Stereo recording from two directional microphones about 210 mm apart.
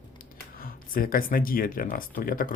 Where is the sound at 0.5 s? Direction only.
45° left (ahead or behind).